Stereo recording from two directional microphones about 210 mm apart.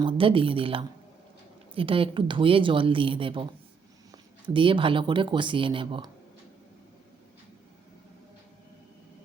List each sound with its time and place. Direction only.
0.0 s a woman's voice: 25° right (ahead or behind)
4.4 s a woman's voice: 25° right (ahead or behind)